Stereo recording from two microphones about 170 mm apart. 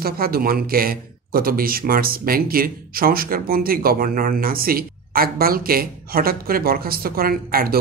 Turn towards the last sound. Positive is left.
turn(degrees=-60)  # may be behind; listen again after turning